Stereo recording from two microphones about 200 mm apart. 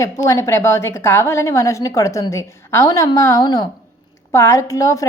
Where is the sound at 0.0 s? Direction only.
15° left (ahead or behind).